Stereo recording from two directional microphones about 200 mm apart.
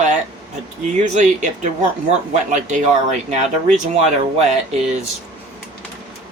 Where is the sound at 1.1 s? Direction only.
40° right (ahead or behind).